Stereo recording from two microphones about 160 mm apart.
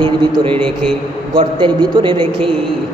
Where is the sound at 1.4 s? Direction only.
30° right (ahead or behind).